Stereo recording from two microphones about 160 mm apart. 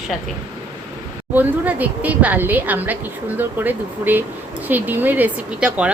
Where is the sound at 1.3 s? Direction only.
10° right (ahead or behind).